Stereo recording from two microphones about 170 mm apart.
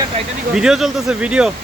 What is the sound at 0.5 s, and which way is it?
Speech, 5° right (ahead or behind).